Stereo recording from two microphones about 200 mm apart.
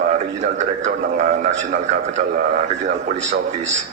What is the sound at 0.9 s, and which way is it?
Speech, 35° right (ahead or behind).